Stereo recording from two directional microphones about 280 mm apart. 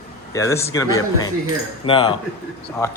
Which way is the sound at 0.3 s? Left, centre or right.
Centre.